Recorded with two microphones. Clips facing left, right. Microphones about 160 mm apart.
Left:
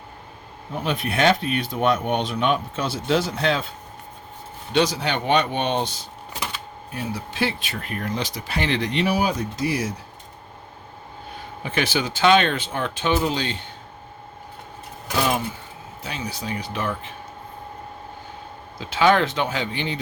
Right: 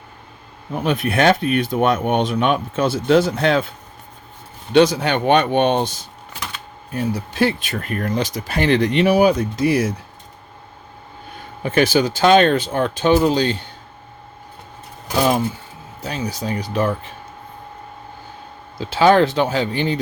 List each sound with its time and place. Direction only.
0.9 s speech: 50° right (ahead or behind)
4.7 s speech: 55° right (ahead or behind)
6.9 s speech: 45° right (ahead or behind)
11.6 s speech: 45° right (ahead or behind)
16.0 s speech: 40° right (ahead or behind)
18.8 s speech: 35° right (ahead or behind)